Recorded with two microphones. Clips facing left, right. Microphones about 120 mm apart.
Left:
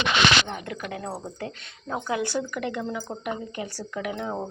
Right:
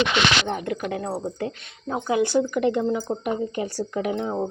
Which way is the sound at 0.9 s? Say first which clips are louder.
Right 5 dB; 25° right (ahead or behind).